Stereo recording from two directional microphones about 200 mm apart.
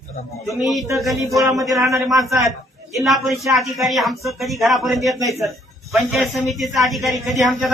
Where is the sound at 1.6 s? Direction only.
15° right (ahead or behind).